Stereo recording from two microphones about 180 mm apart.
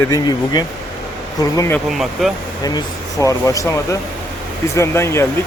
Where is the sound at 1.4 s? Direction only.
15° left (ahead or behind).